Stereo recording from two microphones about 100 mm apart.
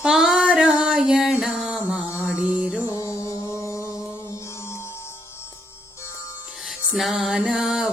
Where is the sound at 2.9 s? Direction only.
30° left (ahead or behind).